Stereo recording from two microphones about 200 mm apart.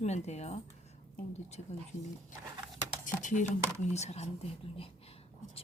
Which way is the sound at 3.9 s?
35° left (ahead or behind).